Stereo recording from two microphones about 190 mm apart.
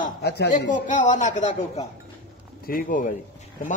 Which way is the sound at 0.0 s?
60° left (ahead or behind).